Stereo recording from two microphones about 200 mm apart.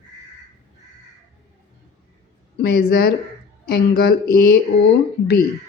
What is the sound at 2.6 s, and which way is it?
Speech, 50° left (ahead or behind).